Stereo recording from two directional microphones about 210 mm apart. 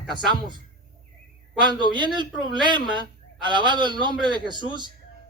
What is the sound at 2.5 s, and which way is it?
A man's voice, 20° right (ahead or behind).